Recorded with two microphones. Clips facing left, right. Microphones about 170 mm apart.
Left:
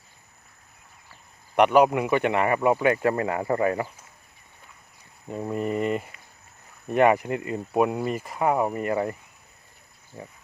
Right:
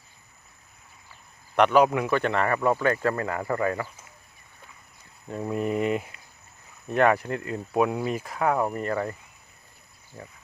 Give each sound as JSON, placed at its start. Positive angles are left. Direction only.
{"t": 1.5, "sound": "speech", "side_deg": 10}
{"t": 5.3, "sound": "speech", "side_deg": 5}
{"t": 6.8, "sound": "speech", "side_deg": 10}
{"t": 10.1, "sound": "frog", "side_deg": 35}